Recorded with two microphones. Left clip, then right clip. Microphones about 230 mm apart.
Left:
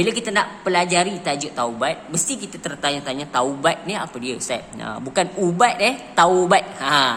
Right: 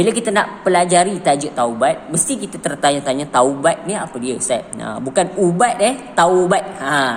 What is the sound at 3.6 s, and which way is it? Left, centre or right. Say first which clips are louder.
A man's voice: right 4 dB; centre.